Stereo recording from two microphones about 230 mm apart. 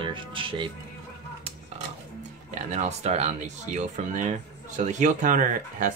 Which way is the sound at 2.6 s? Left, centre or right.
Right.